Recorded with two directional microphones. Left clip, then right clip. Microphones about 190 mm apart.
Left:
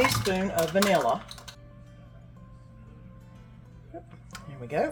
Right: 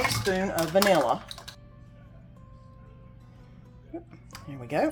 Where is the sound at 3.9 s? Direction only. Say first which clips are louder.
Right 3 dB; 30° right (ahead or behind).